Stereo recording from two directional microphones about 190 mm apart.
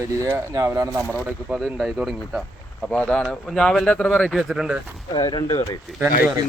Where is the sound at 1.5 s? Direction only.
Centre (ahead or behind).